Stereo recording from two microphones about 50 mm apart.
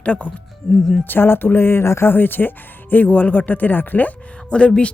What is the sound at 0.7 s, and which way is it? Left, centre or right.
Speech, centre.